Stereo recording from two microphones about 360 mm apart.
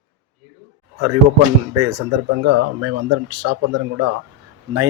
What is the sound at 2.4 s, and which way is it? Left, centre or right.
Speech, right.